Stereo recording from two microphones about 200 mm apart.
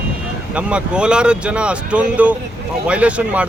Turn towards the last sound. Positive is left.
turn(degrees=-5)  # may be behind; listen again after turning